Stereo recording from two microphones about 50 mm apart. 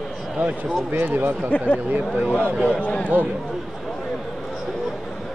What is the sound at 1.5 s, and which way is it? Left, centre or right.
Speech, left.